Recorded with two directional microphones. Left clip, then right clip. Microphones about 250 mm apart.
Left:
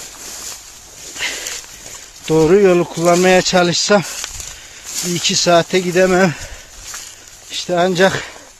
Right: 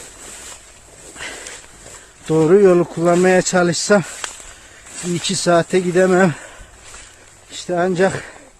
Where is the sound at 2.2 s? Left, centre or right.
Centre.